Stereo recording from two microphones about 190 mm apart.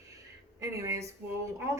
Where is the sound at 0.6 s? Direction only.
15° right (ahead or behind).